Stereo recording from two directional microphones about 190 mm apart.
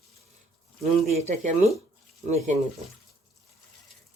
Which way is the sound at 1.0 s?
35° right (ahead or behind).